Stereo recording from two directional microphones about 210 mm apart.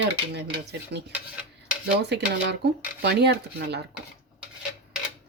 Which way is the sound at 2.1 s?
55° right (ahead or behind).